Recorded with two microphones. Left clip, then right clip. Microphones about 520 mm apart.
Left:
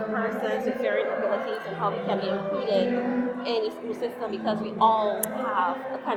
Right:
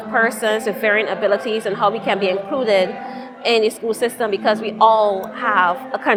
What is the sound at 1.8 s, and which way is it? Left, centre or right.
A woman's voice, right.